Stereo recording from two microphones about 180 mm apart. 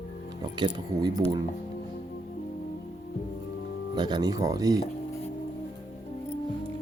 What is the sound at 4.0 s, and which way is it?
Speech, 25° right (ahead or behind).